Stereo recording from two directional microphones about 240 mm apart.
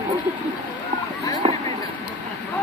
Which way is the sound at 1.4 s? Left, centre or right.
Right.